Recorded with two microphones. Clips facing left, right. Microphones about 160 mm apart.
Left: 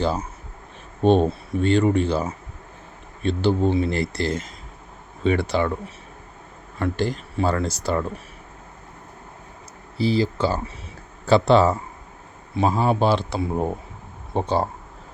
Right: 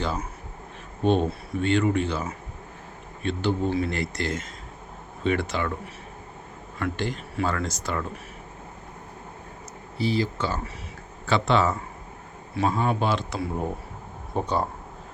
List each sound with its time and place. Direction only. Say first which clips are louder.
1.0 s speech: left 5 dB; 35° left (ahead or behind)
3.2 s speech: left 5 dB; 30° left (ahead or behind)
6.7 s speech: left 5 dB; 35° left (ahead or behind)
10.0 s speech: left 5 dB; 35° left (ahead or behind)